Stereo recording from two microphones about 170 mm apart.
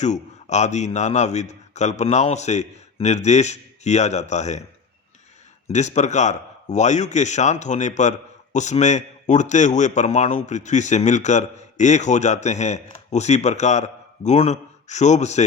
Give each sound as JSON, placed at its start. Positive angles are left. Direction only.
{"t": 0.0, "sound": "a man's voice", "side_deg": 45}
{"t": 5.6, "sound": "a man's voice", "side_deg": 40}